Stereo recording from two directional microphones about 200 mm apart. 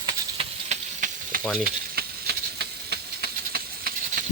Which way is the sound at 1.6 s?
50° right (ahead or behind).